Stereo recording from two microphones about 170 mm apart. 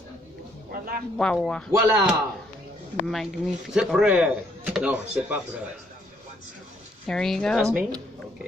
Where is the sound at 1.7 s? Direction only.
15° right (ahead or behind).